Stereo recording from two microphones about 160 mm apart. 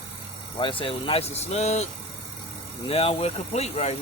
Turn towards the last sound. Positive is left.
turn(degrees=45)  # may be behind; listen again after turning